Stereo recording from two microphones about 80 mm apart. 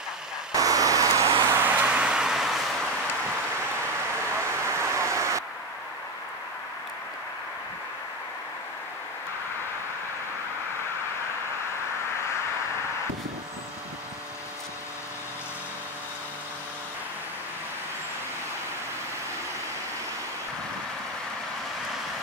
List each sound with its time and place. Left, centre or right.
0.5 s vehicle: right
1.5 s vehicle: right; by 2.9 s centre
4.4 s vehicle: right